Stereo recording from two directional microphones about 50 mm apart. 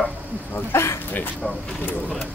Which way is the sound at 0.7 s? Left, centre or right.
Left.